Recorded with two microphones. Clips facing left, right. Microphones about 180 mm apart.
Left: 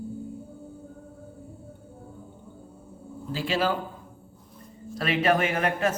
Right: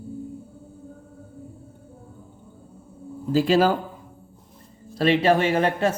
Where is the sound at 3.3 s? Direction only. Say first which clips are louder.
Right 8 dB; 40° right (ahead or behind).